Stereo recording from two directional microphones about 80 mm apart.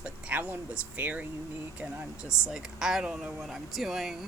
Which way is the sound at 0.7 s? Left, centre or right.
Centre.